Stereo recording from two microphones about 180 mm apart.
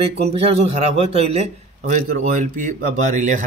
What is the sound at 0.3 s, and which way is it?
A man's voice, 35° right (ahead or behind).